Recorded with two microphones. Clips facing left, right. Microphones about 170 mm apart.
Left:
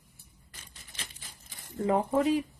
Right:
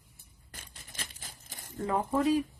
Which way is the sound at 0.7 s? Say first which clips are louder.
Right 1 dB; 45° right (ahead or behind).